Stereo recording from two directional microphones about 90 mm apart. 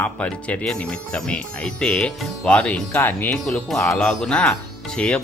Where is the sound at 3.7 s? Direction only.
5° left (ahead or behind).